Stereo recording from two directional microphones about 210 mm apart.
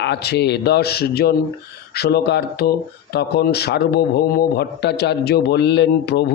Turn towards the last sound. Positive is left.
turn(degrees=50)  # may be behind; listen again after turning